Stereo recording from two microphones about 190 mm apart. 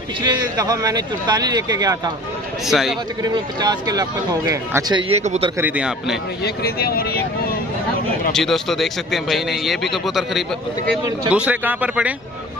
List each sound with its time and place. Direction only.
0.2 s speech: 20° right (ahead or behind)
2.6 s a man's voice: centre (ahead or behind)
3.2 s speech: 20° right (ahead or behind)
5.1 s a man's voice: 35° right (ahead or behind)
5.6 s a man's voice: 5° right (ahead or behind)
6.4 s speech: 55° left (ahead or behind)
8.3 s a man's voice: centre (ahead or behind)